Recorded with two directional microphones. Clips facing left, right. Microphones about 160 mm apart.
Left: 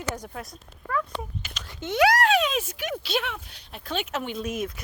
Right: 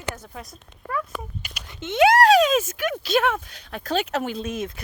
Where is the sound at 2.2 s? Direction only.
40° right (ahead or behind).